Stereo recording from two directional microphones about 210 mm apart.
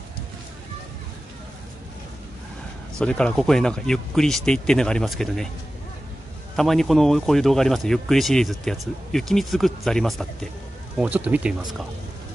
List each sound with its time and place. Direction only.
3.0 s speech: 5° left (ahead or behind)
6.5 s speech: centre (ahead or behind)